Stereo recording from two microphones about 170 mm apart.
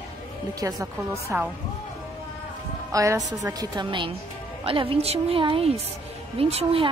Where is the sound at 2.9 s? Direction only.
20° right (ahead or behind).